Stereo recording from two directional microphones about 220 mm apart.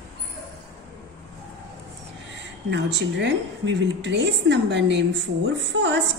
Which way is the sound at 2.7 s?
55° right (ahead or behind).